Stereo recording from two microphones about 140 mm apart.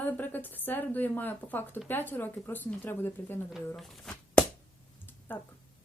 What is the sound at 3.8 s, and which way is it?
Speech, centre (ahead or behind).